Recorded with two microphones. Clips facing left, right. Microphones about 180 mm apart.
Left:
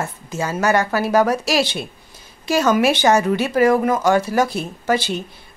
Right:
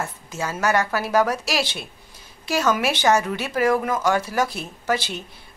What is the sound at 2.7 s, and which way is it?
Speech, centre (ahead or behind).